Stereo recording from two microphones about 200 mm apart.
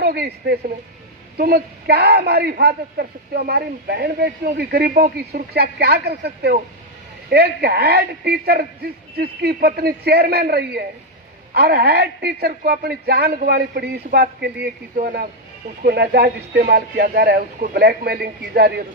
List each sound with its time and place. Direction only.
0.0 s a woman's voice: 50° right (ahead or behind)